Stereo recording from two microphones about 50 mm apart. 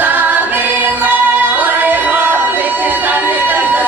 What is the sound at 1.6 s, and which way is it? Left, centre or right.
Music, right.